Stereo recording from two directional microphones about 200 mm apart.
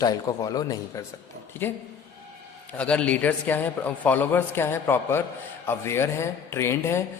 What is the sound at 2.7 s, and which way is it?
A man's voice, 5° left (ahead or behind).